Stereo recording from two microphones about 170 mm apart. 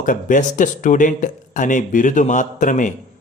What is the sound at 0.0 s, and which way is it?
Speech, 50° left (ahead or behind).